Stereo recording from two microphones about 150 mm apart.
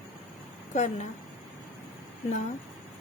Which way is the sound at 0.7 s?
50° left (ahead or behind).